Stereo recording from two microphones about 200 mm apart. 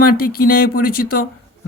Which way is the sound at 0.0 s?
50° left (ahead or behind).